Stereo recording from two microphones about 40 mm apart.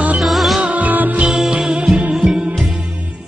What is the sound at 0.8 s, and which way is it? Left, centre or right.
Music, right.